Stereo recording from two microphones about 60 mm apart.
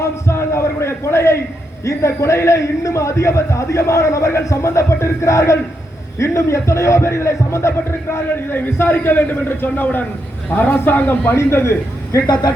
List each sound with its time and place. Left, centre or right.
0.3 s a sound: left
1.8 s a man's voice: left
8.4 s a man's voice: left
11.3 s a man's voice: left